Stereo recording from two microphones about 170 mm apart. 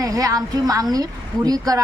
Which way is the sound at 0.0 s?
20° right (ahead or behind).